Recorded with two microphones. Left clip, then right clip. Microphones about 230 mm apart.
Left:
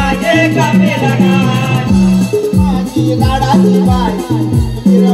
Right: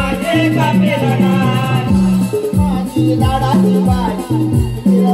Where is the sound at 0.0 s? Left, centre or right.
Left.